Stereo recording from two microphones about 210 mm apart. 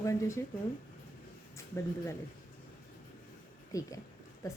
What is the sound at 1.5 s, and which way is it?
Speech, 15° left (ahead or behind).